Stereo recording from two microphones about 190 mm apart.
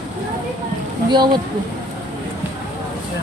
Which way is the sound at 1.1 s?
25° right (ahead or behind).